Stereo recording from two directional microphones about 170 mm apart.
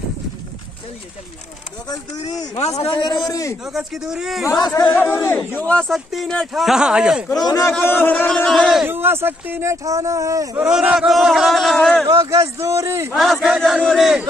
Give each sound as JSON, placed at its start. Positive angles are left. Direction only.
{"t": 2.5, "sound": "a man's voice", "side_deg": 40}
{"t": 3.6, "sound": "speech", "side_deg": -5}
{"t": 4.5, "sound": "a man's voice", "side_deg": 20}
{"t": 4.9, "sound": "speech", "side_deg": 10}
{"t": 7.3, "sound": "a man's voice", "side_deg": 20}
{"t": 8.8, "sound": "speech", "side_deg": -10}
{"t": 10.6, "sound": "speech", "side_deg": -5}
{"t": 12.1, "sound": "a man's voice", "side_deg": -20}
{"t": 13.1, "sound": "speech", "side_deg": 0}